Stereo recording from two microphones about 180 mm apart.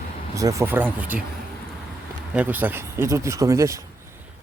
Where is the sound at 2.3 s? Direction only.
10° right (ahead or behind).